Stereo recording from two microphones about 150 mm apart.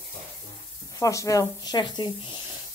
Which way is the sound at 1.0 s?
20° left (ahead or behind).